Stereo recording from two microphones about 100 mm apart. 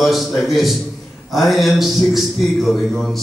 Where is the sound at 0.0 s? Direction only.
Centre (ahead or behind).